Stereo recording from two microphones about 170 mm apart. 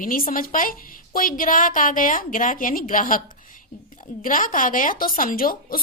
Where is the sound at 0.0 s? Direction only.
55° left (ahead or behind).